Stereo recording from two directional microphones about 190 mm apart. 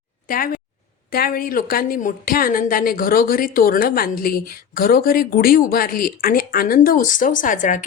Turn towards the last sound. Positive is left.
turn(degrees=40)  # may be behind; listen again after turning